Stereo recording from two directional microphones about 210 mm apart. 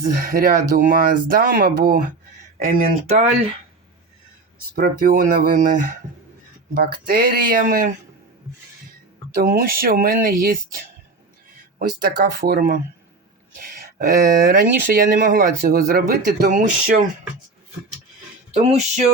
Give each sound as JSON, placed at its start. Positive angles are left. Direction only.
{"t": 0.0, "sound": "speech", "side_deg": -40}
{"t": 4.7, "sound": "speech", "side_deg": -45}
{"t": 9.3, "sound": "speech", "side_deg": -45}
{"t": 11.8, "sound": "speech", "side_deg": -50}
{"t": 14.4, "sound": "speech", "side_deg": -40}
{"t": 18.5, "sound": "speech", "side_deg": -30}